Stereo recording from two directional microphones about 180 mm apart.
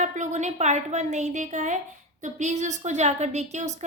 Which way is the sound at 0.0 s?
40° right (ahead or behind).